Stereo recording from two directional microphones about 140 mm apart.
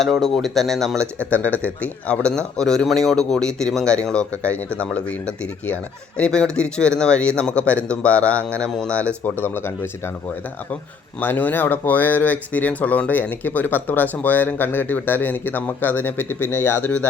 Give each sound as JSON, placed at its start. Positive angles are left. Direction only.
{"t": 0.0, "sound": "speech", "side_deg": 0}
{"t": 11.2, "sound": "speech", "side_deg": 15}